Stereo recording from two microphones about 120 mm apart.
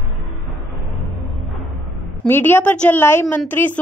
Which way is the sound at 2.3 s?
15° left (ahead or behind).